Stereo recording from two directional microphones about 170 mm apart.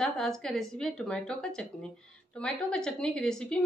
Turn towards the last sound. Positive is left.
turn(degrees=5)  # may be behind; listen again after turning